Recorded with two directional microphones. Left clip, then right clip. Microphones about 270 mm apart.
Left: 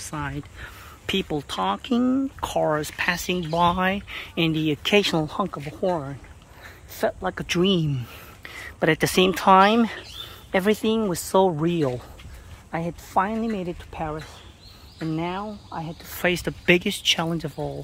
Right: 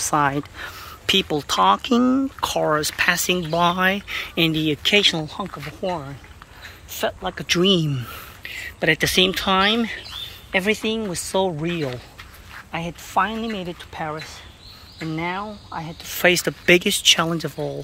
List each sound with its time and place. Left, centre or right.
0.0 s speech: centre
8.5 s speech: centre